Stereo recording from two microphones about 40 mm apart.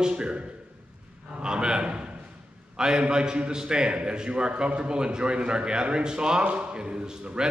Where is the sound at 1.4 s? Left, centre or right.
Right.